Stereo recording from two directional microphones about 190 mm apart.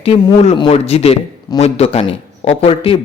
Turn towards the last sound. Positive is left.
turn(degrees=30)  # may be behind; listen again after turning